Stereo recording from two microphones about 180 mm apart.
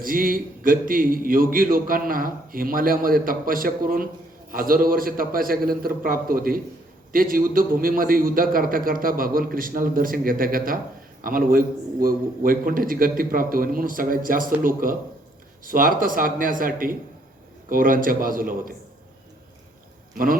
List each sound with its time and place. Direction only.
0.0 s a man's voice: 50° right (ahead or behind)